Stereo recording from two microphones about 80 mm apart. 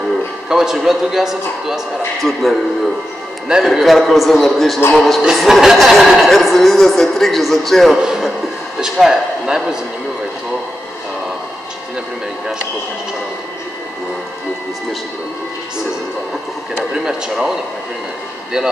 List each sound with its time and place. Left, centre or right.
0.5 s a man's voice: centre
16.9 s a man's voice: centre